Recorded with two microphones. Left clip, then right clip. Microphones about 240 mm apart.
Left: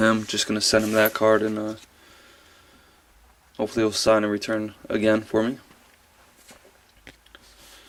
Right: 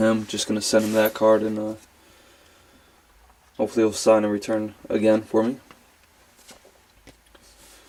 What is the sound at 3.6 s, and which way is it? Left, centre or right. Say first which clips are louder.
Speech: right 2 dB; centre.